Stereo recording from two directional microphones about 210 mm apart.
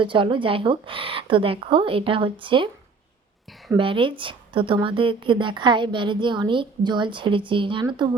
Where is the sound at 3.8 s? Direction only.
25° right (ahead or behind).